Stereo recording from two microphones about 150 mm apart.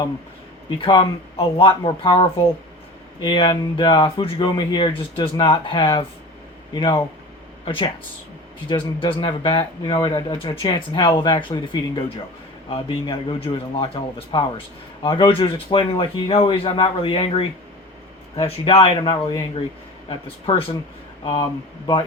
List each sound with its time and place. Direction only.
0.8 s speech: 35° left (ahead or behind)